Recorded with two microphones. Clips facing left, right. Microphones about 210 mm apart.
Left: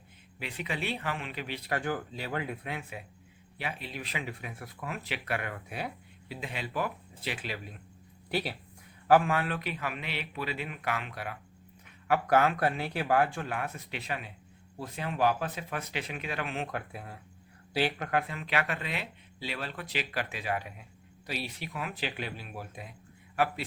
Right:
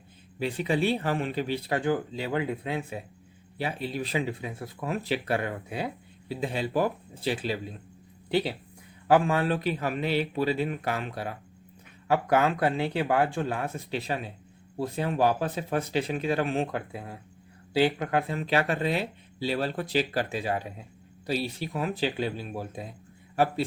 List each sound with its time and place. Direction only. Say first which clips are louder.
0.3 s speech: right 10 dB; 35° right (ahead or behind)